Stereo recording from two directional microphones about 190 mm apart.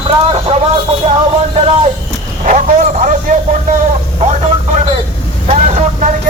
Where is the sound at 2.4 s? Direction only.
40° right (ahead or behind).